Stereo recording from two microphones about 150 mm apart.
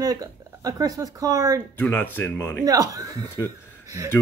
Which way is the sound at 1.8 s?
10° left (ahead or behind).